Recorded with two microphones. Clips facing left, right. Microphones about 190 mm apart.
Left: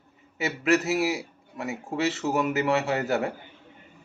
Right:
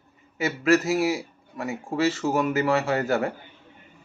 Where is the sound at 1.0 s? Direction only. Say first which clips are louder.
Right 2 dB; 20° left (ahead or behind).